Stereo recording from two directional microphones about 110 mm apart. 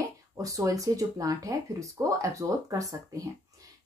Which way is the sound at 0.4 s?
30° right (ahead or behind).